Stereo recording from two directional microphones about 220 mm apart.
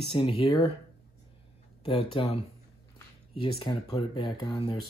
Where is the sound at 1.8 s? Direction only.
25° left (ahead or behind).